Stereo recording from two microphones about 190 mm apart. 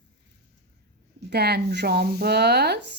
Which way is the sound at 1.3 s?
55° right (ahead or behind).